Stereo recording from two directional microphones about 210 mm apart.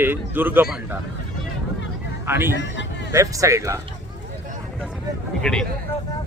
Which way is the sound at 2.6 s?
60° left (ahead or behind).